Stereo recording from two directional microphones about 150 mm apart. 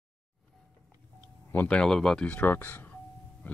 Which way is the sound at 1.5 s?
10° left (ahead or behind).